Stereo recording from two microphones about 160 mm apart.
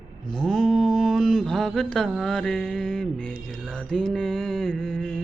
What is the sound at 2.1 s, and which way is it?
Mantra, 5° left (ahead or behind).